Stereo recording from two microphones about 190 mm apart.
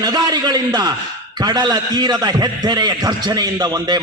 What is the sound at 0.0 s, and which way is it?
A man's voice, 20° right (ahead or behind).